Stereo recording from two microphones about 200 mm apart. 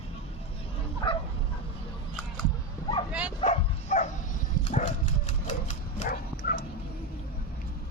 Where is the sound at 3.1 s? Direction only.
5° right (ahead or behind).